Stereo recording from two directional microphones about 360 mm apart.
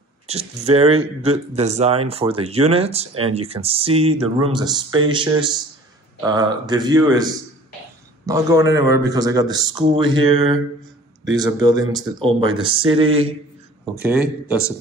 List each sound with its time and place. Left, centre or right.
0.3 s speech: centre
8.3 s speech: centre
11.6 s speech: centre
13.9 s a man's voice: centre